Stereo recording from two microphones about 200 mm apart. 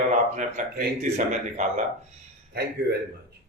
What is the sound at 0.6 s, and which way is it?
Speech, 40° right (ahead or behind).